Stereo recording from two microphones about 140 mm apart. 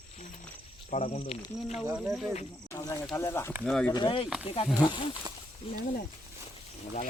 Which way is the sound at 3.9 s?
35° left (ahead or behind).